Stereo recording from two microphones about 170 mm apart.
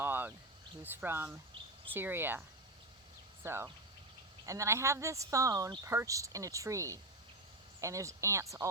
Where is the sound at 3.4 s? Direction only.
15° right (ahead or behind).